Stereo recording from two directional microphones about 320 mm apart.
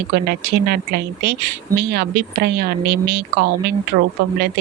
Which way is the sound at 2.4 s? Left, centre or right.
Right.